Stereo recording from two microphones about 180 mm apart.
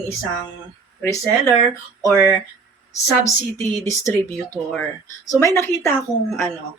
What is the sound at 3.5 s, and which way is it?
Speech, 15° left (ahead or behind).